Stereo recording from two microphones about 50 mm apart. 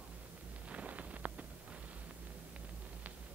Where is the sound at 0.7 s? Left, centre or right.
Right.